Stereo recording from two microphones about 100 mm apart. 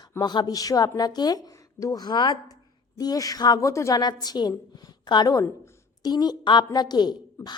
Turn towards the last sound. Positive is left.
turn(degrees=30)  # may be behind; listen again after turning